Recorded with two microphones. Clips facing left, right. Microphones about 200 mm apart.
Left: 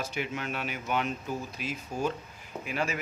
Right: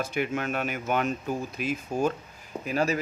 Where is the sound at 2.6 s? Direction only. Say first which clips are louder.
Right 6 dB; 40° right (ahead or behind).